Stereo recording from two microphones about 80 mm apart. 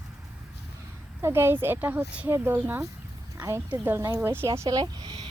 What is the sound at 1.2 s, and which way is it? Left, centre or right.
Speech, right.